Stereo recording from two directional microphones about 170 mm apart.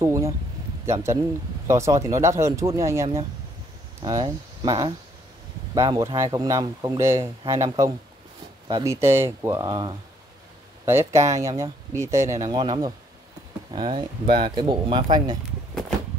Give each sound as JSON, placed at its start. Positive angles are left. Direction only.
{"t": 0.0, "sound": "speech", "side_deg": -15}